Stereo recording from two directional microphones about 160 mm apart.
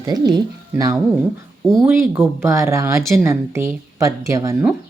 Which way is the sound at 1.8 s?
15° right (ahead or behind).